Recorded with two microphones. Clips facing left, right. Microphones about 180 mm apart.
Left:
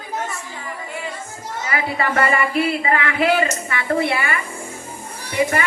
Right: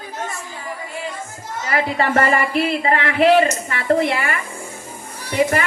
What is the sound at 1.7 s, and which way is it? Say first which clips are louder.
A woman's voice: right 3 dB; 35° right (ahead or behind).